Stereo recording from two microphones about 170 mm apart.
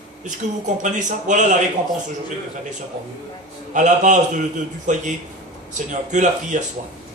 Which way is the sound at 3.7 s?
45° right (ahead or behind).